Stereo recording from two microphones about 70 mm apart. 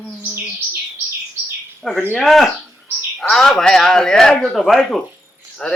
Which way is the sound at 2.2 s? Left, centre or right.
Centre.